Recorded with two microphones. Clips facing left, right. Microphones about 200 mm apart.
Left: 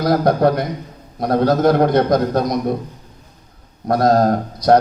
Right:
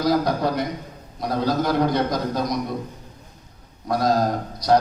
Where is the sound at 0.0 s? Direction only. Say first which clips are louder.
Left 6 dB; 60° left (ahead or behind).